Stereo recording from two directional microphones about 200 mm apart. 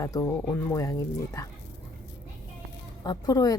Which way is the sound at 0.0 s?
15° left (ahead or behind).